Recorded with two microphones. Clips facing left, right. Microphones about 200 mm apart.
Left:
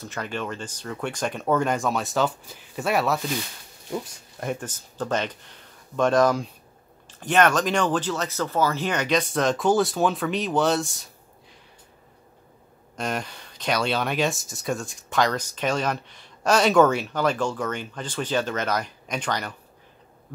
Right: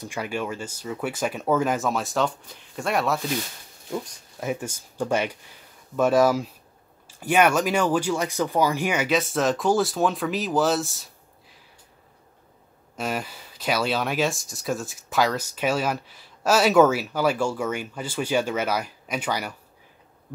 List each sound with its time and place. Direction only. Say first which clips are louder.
0.0 s speech: right 2 dB; 10° right (ahead or behind)
12.9 s speech: even; 5° right (ahead or behind)